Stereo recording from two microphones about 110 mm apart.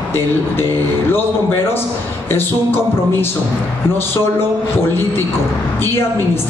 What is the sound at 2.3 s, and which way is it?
Speech, 20° left (ahead or behind).